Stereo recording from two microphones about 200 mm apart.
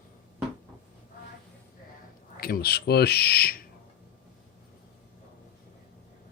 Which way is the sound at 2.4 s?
50° left (ahead or behind).